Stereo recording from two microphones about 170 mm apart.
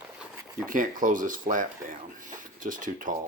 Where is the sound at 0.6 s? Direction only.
50° right (ahead or behind).